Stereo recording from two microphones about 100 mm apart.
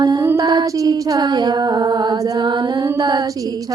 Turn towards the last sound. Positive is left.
turn(degrees=-45)  # may be behind; listen again after turning